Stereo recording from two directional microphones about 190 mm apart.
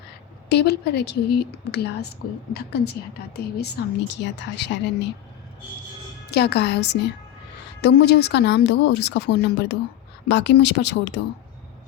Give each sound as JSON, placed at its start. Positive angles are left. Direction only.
{"t": 0.4, "sound": "a woman's voice", "side_deg": 60}
{"t": 6.3, "sound": "a woman's voice", "side_deg": 60}